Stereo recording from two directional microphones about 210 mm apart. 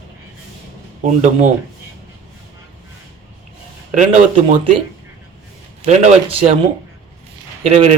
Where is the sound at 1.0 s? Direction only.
35° right (ahead or behind).